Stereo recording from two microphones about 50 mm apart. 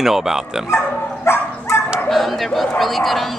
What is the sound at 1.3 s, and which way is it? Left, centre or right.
Dog, left.